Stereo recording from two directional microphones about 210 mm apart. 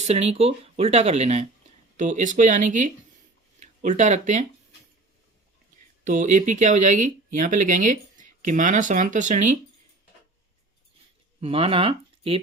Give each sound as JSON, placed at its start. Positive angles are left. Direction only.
{"t": 0.0, "sound": "speech", "side_deg": -30}
{"t": 6.1, "sound": "speech", "side_deg": -35}
{"t": 11.3, "sound": "speech", "side_deg": -25}